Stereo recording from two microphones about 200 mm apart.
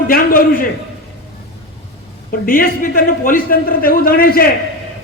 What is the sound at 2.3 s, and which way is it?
A man's voice, 45° left (ahead or behind).